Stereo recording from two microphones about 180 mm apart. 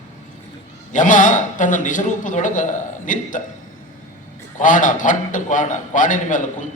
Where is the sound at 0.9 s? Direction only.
45° left (ahead or behind).